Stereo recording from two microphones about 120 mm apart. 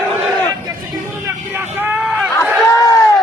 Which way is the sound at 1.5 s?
15° right (ahead or behind).